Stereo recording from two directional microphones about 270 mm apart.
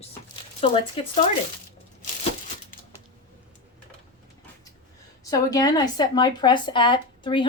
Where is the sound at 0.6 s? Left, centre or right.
Left.